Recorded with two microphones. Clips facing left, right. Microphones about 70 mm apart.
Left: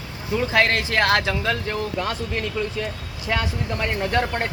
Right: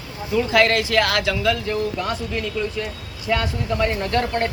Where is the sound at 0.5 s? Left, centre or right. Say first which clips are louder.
Right 3 dB; left.